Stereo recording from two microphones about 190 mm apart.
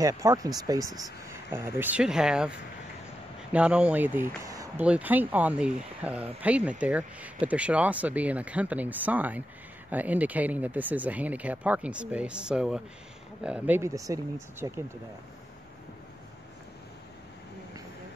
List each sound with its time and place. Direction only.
0.0 s speech: 15° right (ahead or behind)
3.5 s speech: 5° right (ahead or behind)